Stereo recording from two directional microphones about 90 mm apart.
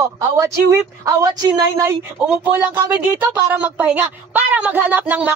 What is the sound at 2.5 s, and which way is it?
A woman's voice, 20° right (ahead or behind).